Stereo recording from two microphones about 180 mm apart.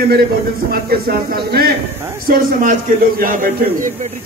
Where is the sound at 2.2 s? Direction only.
50° right (ahead or behind).